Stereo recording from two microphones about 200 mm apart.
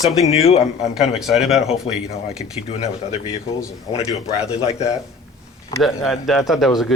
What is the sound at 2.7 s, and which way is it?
Speech, 30° left (ahead or behind).